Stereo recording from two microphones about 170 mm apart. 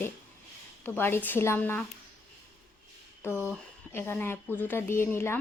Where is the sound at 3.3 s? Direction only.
10° right (ahead or behind).